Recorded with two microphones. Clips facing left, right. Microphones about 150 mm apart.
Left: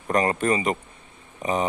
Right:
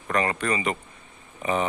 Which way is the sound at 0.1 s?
40° left (ahead or behind).